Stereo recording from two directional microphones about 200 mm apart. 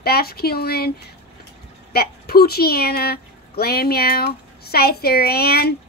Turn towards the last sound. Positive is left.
turn(degrees=50)  # may be behind; listen again after turning